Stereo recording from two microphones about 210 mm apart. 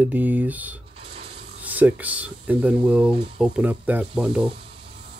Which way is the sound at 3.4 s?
5° right (ahead or behind).